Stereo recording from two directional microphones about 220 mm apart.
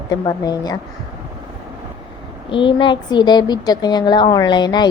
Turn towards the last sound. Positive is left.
turn(degrees=20)  # may be behind; listen again after turning